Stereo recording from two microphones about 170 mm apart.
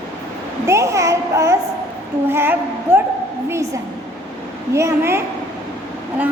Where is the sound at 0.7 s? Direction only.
20° right (ahead or behind).